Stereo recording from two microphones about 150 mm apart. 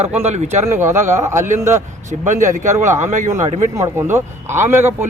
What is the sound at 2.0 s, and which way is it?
Speech, 55° right (ahead or behind).